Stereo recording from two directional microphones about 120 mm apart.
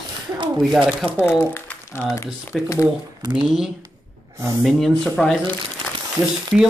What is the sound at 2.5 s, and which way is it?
Speech, centre (ahead or behind).